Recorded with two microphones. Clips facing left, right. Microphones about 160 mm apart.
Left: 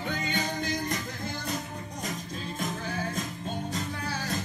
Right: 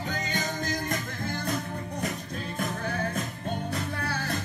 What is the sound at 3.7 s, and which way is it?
Music, 60° right (ahead or behind).